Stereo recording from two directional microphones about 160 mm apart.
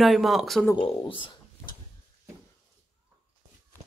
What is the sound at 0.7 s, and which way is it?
Speech, 30° left (ahead or behind).